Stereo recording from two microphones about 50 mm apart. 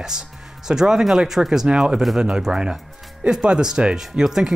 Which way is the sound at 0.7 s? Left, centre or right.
Centre.